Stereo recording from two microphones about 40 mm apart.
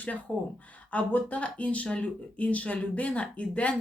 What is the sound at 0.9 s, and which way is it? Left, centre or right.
Speech, left.